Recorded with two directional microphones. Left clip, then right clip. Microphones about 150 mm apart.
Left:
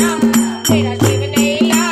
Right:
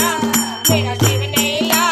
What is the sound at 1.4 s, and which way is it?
Music, 10° right (ahead or behind).